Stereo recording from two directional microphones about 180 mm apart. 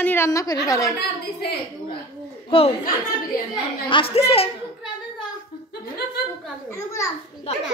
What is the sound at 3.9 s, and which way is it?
Speech, 30° left (ahead or behind).